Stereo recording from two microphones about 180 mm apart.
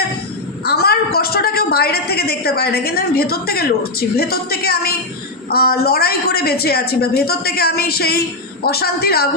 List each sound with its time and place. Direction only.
0.6 s a woman's voice: 60° left (ahead or behind)